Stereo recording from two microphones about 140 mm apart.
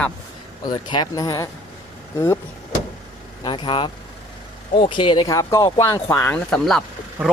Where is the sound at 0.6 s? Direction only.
30° left (ahead or behind).